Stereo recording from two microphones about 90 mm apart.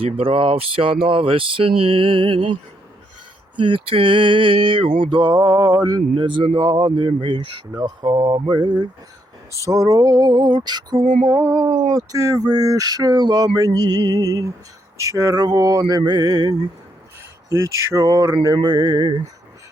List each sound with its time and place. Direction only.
0.0 s speech: 90° right; by 2.5 s 70° right (ahead or behind)
3.6 s mantra: 80° right; by 7.8 s 60° right (ahead or behind)
7.8 s speech: 55° right (ahead or behind)
9.7 s speech: 40° right (ahead or behind)
11.3 s a sound: 30° right (ahead or behind)
11.5 s speech: 55° right (ahead or behind)
11.9 s speech: 40° right (ahead or behind)